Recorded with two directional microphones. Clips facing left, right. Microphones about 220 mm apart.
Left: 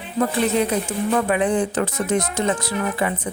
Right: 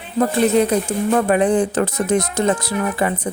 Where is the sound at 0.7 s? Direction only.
40° right (ahead or behind).